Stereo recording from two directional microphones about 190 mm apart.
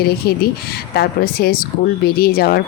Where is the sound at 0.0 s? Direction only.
55° left (ahead or behind).